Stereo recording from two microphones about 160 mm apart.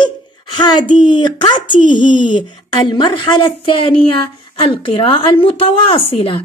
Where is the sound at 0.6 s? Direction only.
25° left (ahead or behind).